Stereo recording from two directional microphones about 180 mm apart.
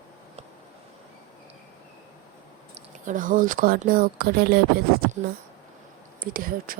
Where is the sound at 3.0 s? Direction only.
50° right (ahead or behind).